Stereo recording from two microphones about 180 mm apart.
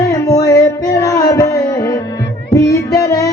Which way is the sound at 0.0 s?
20° left (ahead or behind).